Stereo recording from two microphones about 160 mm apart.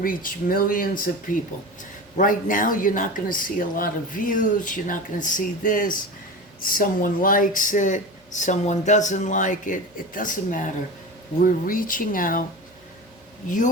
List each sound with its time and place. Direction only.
0.0 s speech: 60° left (ahead or behind)